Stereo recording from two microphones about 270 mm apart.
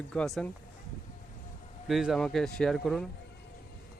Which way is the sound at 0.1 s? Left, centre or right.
Centre.